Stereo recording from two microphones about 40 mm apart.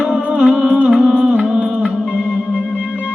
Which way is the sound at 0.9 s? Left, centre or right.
Centre.